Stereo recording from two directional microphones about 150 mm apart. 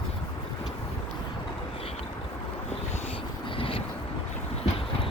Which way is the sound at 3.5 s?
40° left (ahead or behind).